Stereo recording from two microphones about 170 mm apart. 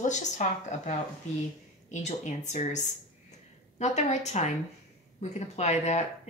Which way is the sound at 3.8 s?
40° left (ahead or behind).